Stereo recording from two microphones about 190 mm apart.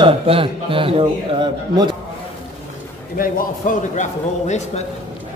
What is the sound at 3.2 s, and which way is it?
A man's voice, 45° left (ahead or behind).